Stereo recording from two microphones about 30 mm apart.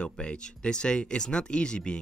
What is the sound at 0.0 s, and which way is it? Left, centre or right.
Speech, left.